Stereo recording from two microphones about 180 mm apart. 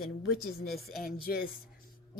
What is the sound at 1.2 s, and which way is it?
Speech, 55° left (ahead or behind).